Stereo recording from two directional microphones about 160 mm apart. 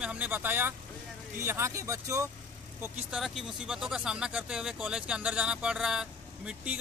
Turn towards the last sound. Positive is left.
turn(degrees=-5)  # may be behind; listen again after turning